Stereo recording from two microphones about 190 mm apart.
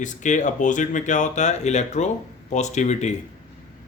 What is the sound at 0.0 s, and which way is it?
Speech, 40° left (ahead or behind).